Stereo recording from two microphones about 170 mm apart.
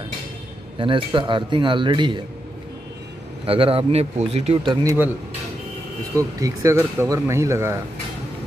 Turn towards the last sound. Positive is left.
turn(degrees=-15)  # may be behind; listen again after turning